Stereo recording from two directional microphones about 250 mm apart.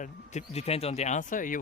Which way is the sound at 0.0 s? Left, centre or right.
Left.